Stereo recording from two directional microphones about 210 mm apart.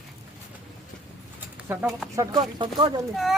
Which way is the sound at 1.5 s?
5° right (ahead or behind).